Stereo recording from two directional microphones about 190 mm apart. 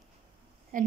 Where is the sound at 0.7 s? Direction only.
45° right (ahead or behind).